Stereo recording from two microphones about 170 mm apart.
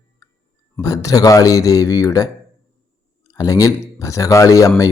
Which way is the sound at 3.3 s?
20° left (ahead or behind).